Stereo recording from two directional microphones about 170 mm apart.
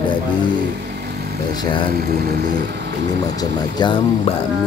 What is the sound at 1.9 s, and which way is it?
Speech, 65° right (ahead or behind).